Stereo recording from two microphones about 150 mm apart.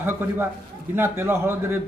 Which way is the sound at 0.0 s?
15° right (ahead or behind).